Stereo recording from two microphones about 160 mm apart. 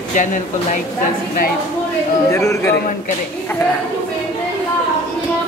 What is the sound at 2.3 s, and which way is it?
Speech, 15° left (ahead or behind).